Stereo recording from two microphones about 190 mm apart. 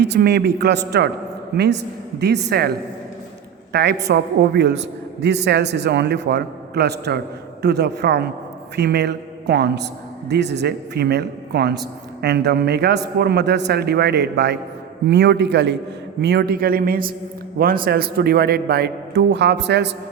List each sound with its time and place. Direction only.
0.0 s a man's voice: 60° right (ahead or behind)